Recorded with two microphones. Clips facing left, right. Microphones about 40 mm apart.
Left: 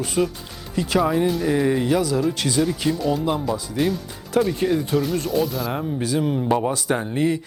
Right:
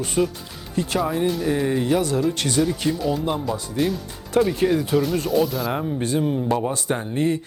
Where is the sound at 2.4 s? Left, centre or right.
Centre.